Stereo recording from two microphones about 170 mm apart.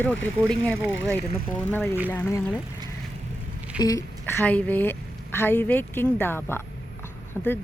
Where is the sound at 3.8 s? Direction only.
20° left (ahead or behind).